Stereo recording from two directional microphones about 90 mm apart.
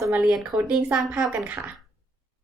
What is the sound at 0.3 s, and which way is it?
Speech, centre (ahead or behind).